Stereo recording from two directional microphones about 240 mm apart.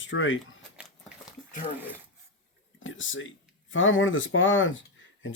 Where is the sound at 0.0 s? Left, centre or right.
Left.